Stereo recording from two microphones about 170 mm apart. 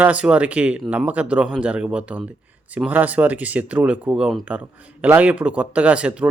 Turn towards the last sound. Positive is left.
turn(degrees=-5)  # may be behind; listen again after turning